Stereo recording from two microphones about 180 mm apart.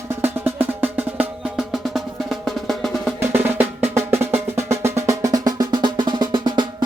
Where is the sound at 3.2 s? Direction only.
10° right (ahead or behind).